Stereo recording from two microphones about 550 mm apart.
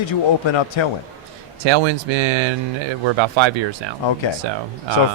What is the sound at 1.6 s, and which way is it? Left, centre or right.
Speech, right.